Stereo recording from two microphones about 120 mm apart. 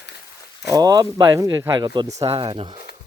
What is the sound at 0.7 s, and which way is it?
Speech, 30° right (ahead or behind).